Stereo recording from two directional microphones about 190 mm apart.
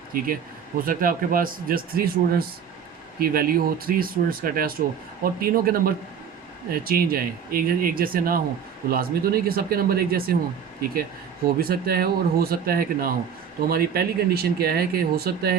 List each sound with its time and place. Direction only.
0.1 s speech: 50° right (ahead or behind)
11.4 s speech: 50° right (ahead or behind)